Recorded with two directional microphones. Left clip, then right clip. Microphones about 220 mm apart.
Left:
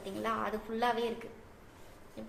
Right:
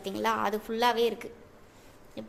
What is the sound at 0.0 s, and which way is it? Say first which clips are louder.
A woman's voice: right 6 dB; 45° right (ahead or behind).